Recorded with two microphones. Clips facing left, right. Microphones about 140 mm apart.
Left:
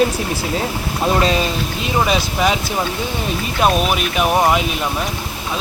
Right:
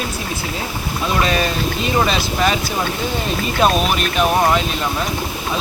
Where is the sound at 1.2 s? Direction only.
25° left (ahead or behind).